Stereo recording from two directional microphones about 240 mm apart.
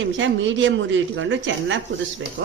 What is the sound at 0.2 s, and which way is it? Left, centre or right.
A woman's voice, right.